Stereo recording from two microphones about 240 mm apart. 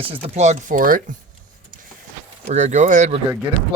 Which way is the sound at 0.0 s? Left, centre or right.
Right.